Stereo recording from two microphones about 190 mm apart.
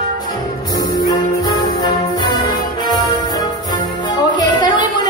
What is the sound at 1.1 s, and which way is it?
Music, 20° left (ahead or behind).